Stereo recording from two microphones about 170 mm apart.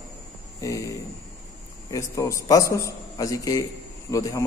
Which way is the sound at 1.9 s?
20° left (ahead or behind).